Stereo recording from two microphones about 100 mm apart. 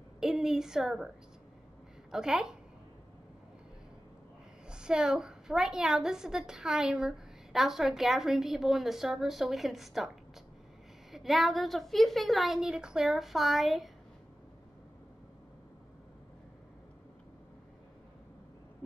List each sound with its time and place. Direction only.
0.2 s a woman's voice: 5° right (ahead or behind)
4.6 s a woman's voice: 10° right (ahead or behind)
11.1 s a woman's voice: centre (ahead or behind)